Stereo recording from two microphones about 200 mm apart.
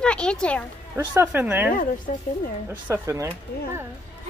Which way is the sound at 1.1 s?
10° right (ahead or behind).